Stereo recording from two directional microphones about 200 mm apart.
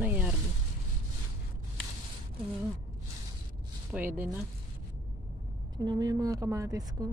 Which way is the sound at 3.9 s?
10° right (ahead or behind).